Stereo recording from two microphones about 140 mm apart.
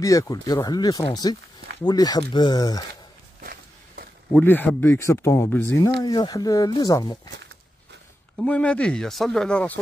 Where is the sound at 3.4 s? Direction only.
90° right.